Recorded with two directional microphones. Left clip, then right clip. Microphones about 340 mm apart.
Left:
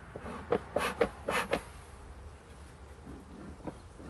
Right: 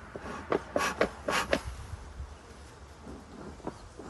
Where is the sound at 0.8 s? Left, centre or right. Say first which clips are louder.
Right 4 dB; centre.